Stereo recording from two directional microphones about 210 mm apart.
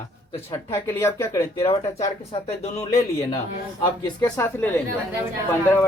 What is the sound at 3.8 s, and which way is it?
Speech, 20° left (ahead or behind).